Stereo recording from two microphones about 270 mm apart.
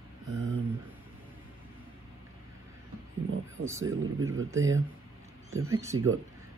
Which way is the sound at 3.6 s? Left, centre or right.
Centre.